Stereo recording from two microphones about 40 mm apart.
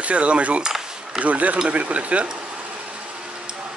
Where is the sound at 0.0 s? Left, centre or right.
Right.